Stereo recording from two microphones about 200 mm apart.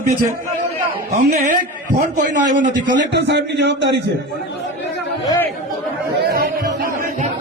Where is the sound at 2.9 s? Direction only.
60° right (ahead or behind).